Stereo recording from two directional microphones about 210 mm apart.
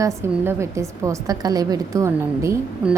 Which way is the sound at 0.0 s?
15° right (ahead or behind).